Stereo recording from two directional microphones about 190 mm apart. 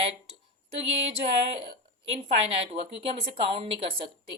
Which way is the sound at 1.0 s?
30° right (ahead or behind).